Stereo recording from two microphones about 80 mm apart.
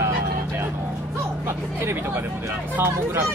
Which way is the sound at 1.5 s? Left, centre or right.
Right.